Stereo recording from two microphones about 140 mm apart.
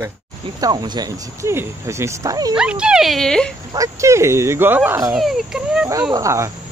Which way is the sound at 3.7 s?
20° right (ahead or behind).